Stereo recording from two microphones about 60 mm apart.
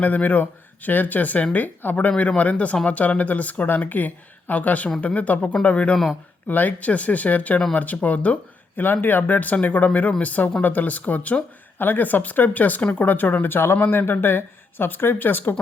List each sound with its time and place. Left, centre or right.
0.0 s speech: left